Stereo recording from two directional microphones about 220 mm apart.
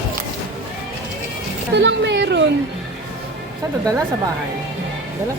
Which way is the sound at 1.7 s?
50° right (ahead or behind).